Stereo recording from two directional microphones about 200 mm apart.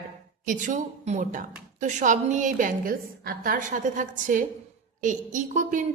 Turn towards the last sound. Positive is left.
turn(degrees=-40)  # may be behind; listen again after turning